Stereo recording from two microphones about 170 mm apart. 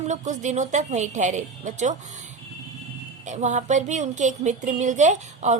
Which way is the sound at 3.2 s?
45° right (ahead or behind).